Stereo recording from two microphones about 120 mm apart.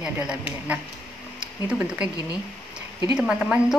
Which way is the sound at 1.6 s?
10° right (ahead or behind).